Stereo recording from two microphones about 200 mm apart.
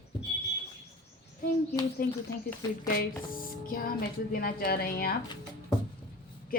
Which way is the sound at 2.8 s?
45° left (ahead or behind).